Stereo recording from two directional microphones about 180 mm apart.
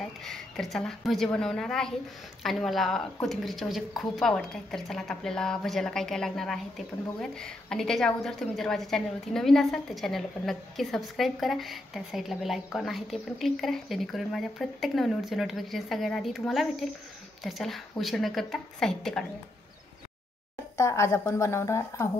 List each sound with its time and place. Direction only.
0.0 s a woman's voice: centre (ahead or behind)
20.7 s speech: 15° left (ahead or behind)